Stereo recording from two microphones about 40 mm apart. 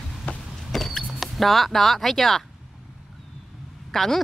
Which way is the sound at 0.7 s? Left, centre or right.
Centre.